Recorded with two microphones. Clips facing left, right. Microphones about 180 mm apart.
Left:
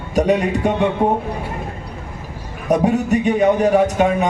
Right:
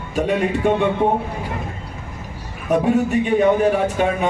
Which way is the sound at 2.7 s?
40° left (ahead or behind).